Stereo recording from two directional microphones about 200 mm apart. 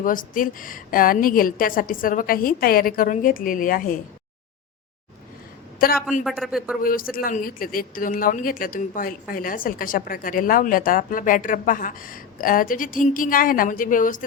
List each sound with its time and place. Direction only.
0.0 s speech: 45° left (ahead or behind)
5.8 s speech: 45° left (ahead or behind)
6.2 s speech: centre (ahead or behind)
6.8 s speech: 45° left (ahead or behind)